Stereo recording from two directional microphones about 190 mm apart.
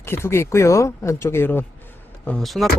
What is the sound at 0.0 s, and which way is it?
Speech, 15° left (ahead or behind).